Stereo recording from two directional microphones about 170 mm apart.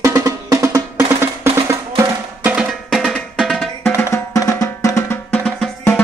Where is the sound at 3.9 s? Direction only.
15° left (ahead or behind).